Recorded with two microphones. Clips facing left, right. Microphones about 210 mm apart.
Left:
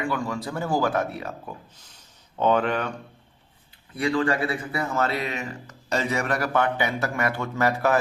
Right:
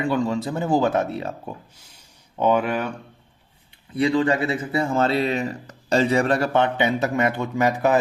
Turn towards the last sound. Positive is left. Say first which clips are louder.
# right 3 dB
turn(degrees=-15)  # may be behind; listen again after turning